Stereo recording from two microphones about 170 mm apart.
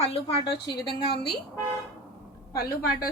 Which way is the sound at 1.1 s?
70° left (ahead or behind).